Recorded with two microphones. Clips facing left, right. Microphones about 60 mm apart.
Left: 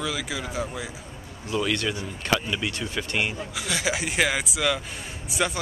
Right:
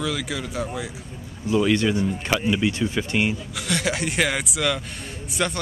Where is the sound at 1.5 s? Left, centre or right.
Centre.